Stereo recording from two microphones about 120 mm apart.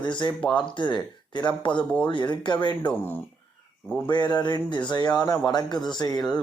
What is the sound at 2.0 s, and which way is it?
Speech, 40° left (ahead or behind).